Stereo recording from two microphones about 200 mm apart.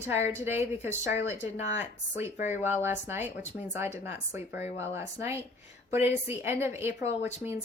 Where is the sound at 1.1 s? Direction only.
30° left (ahead or behind).